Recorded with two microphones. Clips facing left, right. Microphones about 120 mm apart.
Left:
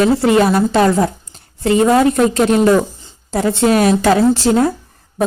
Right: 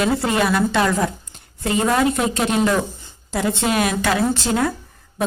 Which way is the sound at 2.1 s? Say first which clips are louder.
Left 7 dB; 45° left (ahead or behind).